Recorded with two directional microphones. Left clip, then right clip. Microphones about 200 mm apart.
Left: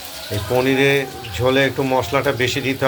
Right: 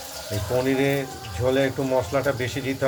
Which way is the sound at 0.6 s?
5° left (ahead or behind).